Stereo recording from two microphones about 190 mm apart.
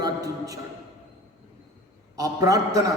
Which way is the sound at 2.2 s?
20° right (ahead or behind).